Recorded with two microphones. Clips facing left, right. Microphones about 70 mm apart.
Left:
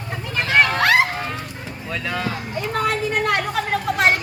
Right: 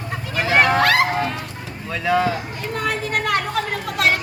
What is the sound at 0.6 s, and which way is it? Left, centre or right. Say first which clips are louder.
Speech: right 2 dB; right.